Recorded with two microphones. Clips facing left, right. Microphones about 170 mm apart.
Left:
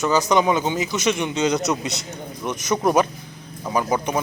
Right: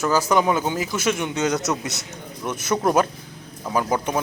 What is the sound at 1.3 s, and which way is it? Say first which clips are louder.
Speech: left 2 dB; 15° left (ahead or behind).